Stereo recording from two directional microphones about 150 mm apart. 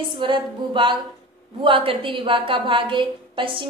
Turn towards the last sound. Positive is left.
turn(degrees=-35)  # may be behind; listen again after turning